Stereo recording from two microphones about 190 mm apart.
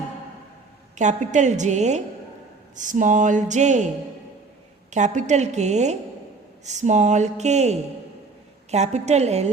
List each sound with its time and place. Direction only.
0.9 s speech: 40° right (ahead or behind)
4.9 s speech: 40° right (ahead or behind)